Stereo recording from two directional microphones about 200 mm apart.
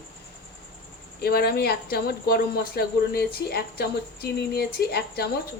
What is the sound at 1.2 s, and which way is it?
Speech, 50° left (ahead or behind).